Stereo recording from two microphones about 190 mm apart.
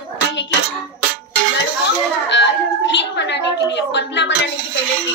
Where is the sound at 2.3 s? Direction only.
70° left (ahead or behind).